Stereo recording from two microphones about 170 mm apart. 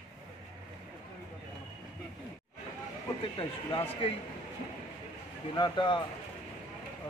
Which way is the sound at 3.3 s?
30° left (ahead or behind).